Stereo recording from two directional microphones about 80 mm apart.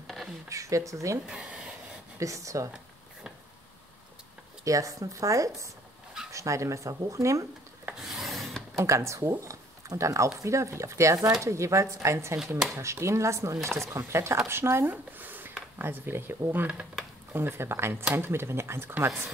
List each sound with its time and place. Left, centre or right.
0.0 s a sound: centre
0.5 s speech: right
1.2 s speech: centre
2.1 s speech: right
4.6 s speech: right
8.0 s rub: centre
8.7 s speech: right